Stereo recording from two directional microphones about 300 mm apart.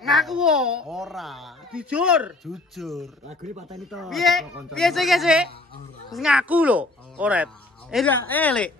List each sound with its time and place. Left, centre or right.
0.0 s a woman's voice: centre
3.3 s speech: right
3.9 s a woman's voice: centre